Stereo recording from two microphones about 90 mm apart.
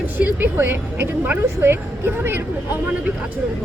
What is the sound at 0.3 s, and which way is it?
A woman's voice, 25° right (ahead or behind).